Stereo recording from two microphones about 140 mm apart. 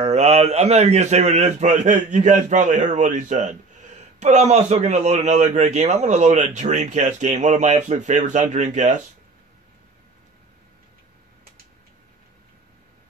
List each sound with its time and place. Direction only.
0.0 s a man's voice: 50° right (ahead or behind)